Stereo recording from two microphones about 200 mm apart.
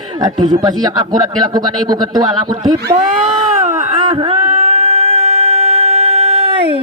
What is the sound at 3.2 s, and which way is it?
Cat, 25° right (ahead or behind).